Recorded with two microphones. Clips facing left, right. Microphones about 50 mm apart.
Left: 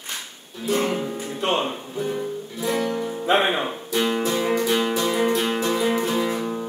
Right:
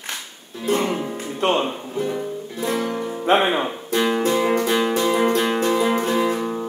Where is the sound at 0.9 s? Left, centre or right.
Right.